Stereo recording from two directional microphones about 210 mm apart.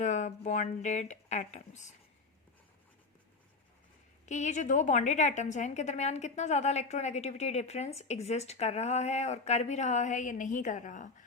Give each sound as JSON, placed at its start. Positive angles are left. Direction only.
{"t": 0.0, "sound": "a woman's voice", "side_deg": 35}
{"t": 4.3, "sound": "a woman's voice", "side_deg": 35}